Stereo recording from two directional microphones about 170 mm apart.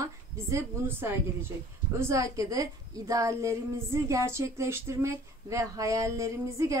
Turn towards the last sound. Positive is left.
turn(degrees=-20)  # may be behind; listen again after turning